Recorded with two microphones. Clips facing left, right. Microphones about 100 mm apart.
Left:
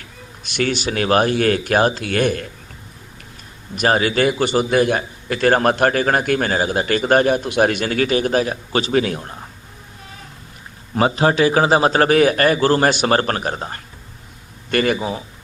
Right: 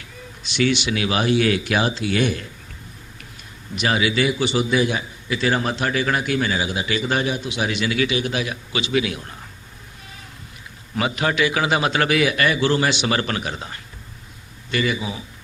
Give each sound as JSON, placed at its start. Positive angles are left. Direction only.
{"t": 0.4, "sound": "a man's voice", "side_deg": 50}
{"t": 3.8, "sound": "a man's voice", "side_deg": 45}
{"t": 10.9, "sound": "a man's voice", "side_deg": 35}